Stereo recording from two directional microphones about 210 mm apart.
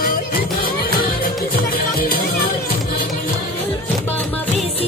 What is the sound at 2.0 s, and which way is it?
Music, 45° left (ahead or behind).